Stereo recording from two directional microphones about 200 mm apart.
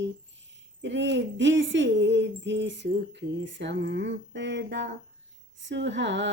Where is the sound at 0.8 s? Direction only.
60° right (ahead or behind).